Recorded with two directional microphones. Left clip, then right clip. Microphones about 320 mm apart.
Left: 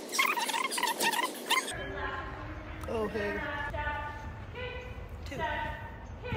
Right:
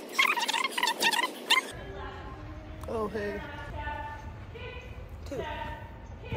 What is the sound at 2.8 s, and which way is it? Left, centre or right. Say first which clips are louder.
Speech: even; centre.